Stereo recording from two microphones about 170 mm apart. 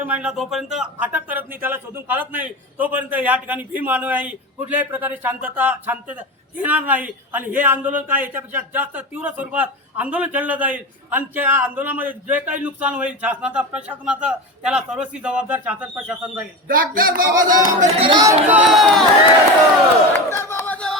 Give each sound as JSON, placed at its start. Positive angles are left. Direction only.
{"t": 0.0, "sound": "speech", "side_deg": -10}
{"t": 16.6, "sound": "speech", "side_deg": -55}
{"t": 18.0, "sound": "speech", "side_deg": -25}
{"t": 18.4, "sound": "speech", "side_deg": -5}
{"t": 20.1, "sound": "a sound", "side_deg": 15}